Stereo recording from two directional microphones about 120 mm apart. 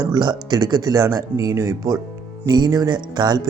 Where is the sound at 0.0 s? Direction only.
35° right (ahead or behind).